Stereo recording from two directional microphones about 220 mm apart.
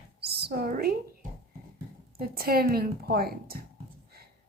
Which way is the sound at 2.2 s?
45° right (ahead or behind).